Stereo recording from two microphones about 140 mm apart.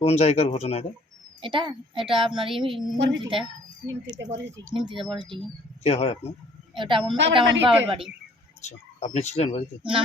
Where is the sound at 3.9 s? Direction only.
25° right (ahead or behind).